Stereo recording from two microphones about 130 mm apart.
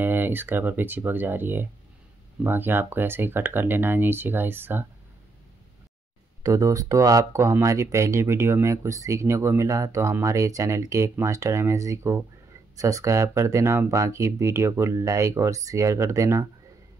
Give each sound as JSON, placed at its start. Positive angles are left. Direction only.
{"t": 0.0, "sound": "speech", "side_deg": -15}
{"t": 6.4, "sound": "speech", "side_deg": -25}